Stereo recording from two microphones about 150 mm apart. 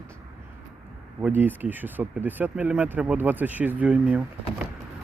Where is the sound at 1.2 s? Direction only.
10° right (ahead or behind).